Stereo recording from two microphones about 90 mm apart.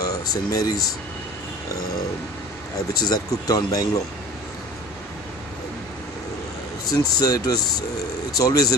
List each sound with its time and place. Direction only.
0.0 s speech: 45° left (ahead or behind)
2.9 s speech: 45° left (ahead or behind)
6.9 s speech: 45° left (ahead or behind)